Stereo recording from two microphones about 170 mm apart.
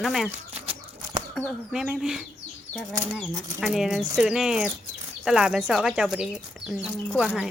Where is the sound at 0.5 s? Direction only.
35° right (ahead or behind).